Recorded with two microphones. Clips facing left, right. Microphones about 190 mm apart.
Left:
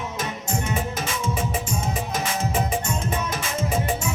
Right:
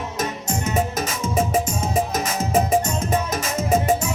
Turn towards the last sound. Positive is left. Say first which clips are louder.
# right 5 dB
turn(degrees=-40)  # may be behind; listen again after turning